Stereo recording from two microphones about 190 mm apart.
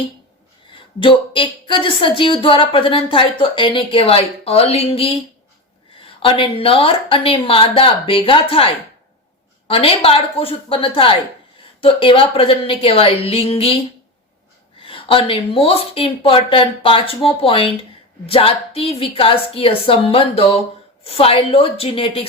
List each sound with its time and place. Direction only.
0.9 s speech: 25° left (ahead or behind)
14.8 s a woman's voice: 30° left (ahead or behind)